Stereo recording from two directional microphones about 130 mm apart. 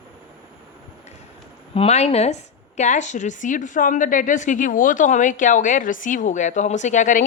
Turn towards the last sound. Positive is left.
turn(degrees=75)  # may be behind; listen again after turning